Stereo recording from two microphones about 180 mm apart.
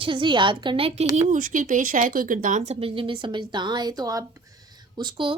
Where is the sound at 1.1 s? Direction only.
45° right (ahead or behind).